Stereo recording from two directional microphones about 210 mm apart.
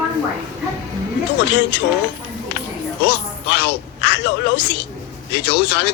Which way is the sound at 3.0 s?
55° left (ahead or behind).